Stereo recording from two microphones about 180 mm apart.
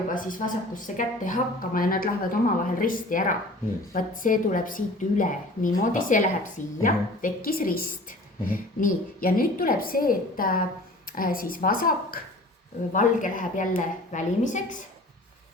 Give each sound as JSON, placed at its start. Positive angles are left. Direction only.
{"t": 0.1, "sound": "speech", "side_deg": 45}